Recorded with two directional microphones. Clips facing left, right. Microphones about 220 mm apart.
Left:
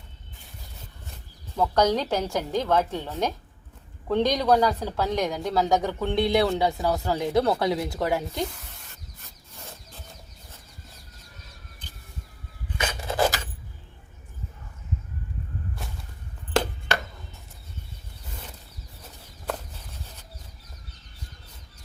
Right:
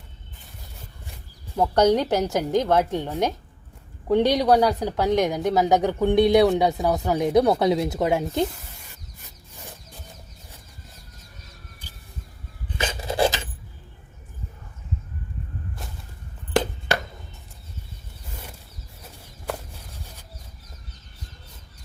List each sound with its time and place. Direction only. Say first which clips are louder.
1.0 s wild animals: right 1 dB; 10° right (ahead or behind)
1.8 s speech: right 5 dB; 15° right (ahead or behind)
12.7 s filing: right 2 dB; 25° right (ahead or behind)